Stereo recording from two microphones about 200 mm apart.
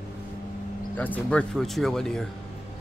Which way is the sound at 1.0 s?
5° left (ahead or behind).